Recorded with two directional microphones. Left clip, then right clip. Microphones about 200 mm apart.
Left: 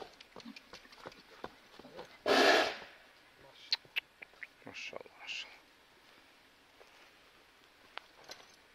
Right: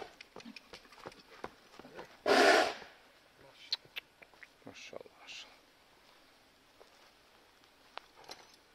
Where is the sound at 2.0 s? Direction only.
5° right (ahead or behind).